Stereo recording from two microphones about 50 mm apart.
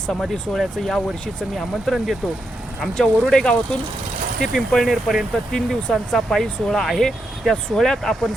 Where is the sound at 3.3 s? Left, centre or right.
Centre.